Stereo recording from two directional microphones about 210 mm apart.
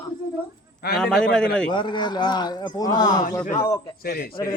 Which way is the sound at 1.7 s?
20° left (ahead or behind).